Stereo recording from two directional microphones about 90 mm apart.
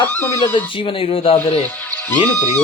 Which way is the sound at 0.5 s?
90° left.